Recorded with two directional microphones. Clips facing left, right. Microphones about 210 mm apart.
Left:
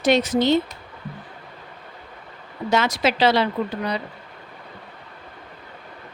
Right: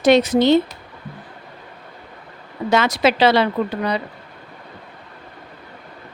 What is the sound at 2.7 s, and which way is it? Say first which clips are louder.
Speech: right 4 dB; 70° right (ahead or behind).